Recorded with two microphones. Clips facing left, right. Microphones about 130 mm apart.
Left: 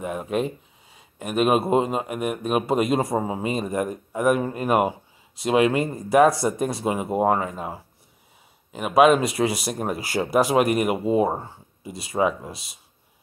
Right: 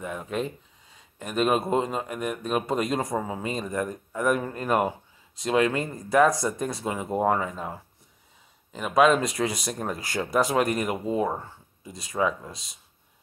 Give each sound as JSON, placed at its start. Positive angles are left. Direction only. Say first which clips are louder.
{"t": 0.0, "sound": "speech", "louder": "left 5 dB", "side_deg": 20}
{"t": 11.2, "sound": "speech", "louder": "left 4 dB", "side_deg": 30}
{"t": 11.8, "sound": "speech", "louder": "left 4 dB", "side_deg": 10}